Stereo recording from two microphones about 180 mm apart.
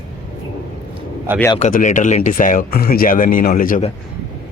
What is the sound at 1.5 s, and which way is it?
Speech, 40° left (ahead or behind).